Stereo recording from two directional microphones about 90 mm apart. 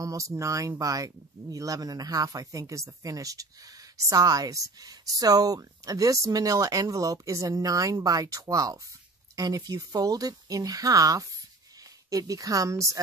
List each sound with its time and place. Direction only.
0.0 s speech: 35° right (ahead or behind)